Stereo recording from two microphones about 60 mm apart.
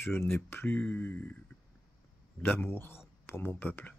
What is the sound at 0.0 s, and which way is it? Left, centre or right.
Speech, left.